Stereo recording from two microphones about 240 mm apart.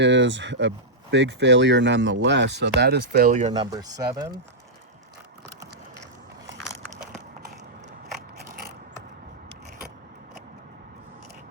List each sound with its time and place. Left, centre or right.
0.0 s speech: right
3.5 s speech: centre
6.5 s biting: right